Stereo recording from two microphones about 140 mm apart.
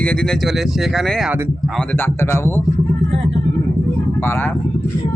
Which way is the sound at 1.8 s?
15° left (ahead or behind).